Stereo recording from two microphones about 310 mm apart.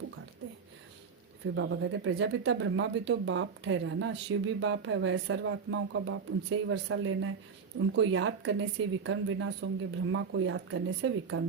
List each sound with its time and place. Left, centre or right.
1.5 s speech: right